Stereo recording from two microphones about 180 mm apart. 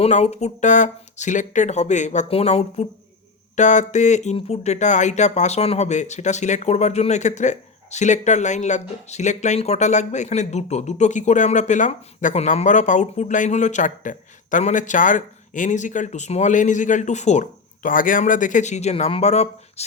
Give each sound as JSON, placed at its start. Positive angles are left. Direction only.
{"t": 0.0, "sound": "speech", "side_deg": 35}